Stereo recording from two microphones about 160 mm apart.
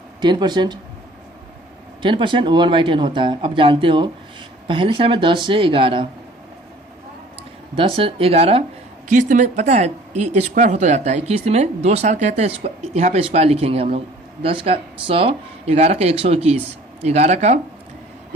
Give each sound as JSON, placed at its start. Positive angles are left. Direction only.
{"t": 0.2, "sound": "speech", "side_deg": -30}
{"t": 2.0, "sound": "speech", "side_deg": -30}
{"t": 7.8, "sound": "speech", "side_deg": -35}
{"t": 9.0, "sound": "speech", "side_deg": -55}